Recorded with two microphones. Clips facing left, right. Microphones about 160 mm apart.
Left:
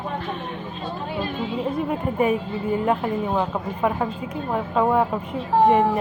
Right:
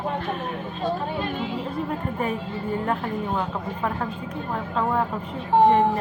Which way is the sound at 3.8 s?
10° left (ahead or behind).